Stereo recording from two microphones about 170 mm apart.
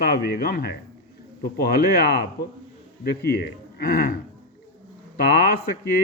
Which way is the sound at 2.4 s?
65° left (ahead or behind).